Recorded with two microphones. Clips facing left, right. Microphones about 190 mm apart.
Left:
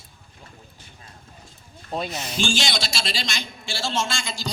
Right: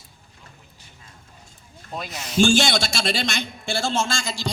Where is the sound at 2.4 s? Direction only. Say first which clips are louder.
Right 8 dB; 55° right (ahead or behind).